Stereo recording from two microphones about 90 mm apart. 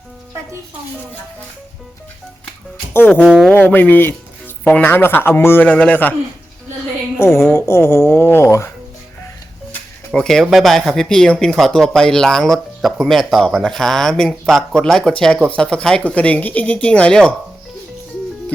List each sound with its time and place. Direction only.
3.2 s speech: 5° right (ahead or behind)
3.5 s speech: 20° left (ahead or behind)
5.6 s speech: 15° left (ahead or behind)
7.2 s speech: 30° left (ahead or behind)
10.1 s speech: 5° left (ahead or behind)